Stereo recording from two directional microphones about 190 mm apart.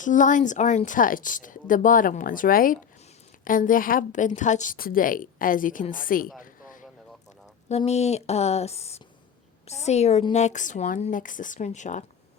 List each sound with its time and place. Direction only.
0.0 s a woman's voice: 40° left (ahead or behind)
6.4 s a sound: 45° left (ahead or behind)
7.7 s a woman's voice: 35° left (ahead or behind)